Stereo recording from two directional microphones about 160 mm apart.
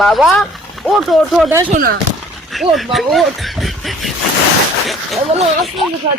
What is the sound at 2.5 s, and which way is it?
Speech, centre (ahead or behind).